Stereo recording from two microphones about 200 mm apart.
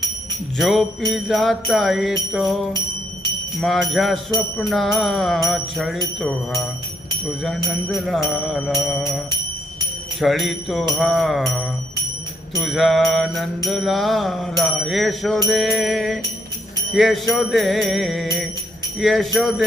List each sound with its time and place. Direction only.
0.6 s jingle bell: centre (ahead or behind)